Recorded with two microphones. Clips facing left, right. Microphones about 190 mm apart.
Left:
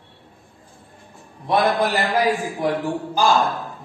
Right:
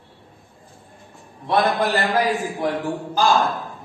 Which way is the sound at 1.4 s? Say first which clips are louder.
Left 1 dB; 10° left (ahead or behind).